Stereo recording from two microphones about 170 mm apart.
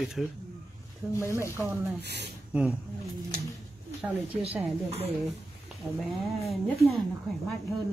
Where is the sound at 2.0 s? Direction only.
80° right.